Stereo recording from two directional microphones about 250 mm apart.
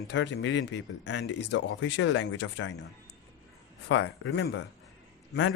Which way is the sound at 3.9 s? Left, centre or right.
Left.